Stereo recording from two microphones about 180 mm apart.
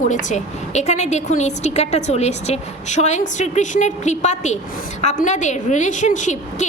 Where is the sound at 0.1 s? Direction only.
45° left (ahead or behind).